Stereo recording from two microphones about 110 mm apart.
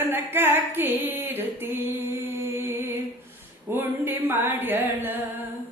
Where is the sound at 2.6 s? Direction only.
20° right (ahead or behind).